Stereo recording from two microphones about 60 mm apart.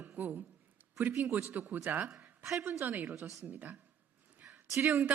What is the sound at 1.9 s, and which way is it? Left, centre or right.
Speech, right.